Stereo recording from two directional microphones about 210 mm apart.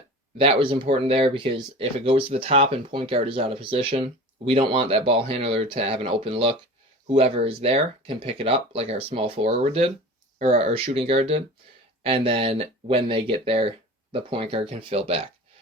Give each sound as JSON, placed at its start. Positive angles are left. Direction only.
{"t": 0.3, "sound": "speech", "side_deg": -25}